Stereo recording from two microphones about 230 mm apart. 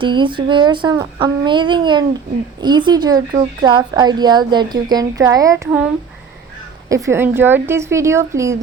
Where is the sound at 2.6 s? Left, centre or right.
Centre.